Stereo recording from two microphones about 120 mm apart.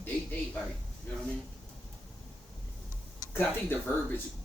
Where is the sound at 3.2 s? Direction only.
15° left (ahead or behind).